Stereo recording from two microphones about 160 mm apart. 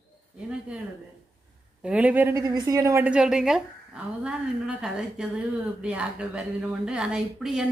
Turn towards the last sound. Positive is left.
turn(degrees=-5)  # may be behind; listen again after turning